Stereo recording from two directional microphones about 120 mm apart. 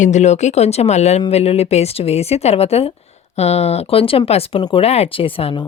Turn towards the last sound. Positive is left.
turn(degrees=45)  # may be behind; listen again after turning